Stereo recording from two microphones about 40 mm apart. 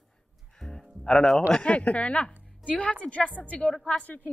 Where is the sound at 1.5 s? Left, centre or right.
Left.